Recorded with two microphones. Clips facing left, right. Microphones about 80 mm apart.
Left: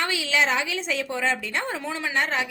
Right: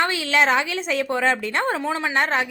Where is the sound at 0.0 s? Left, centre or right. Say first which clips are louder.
Right 4 dB; right.